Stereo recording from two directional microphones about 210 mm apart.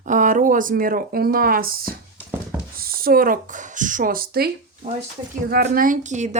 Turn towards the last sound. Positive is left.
turn(degrees=-35)  # may be behind; listen again after turning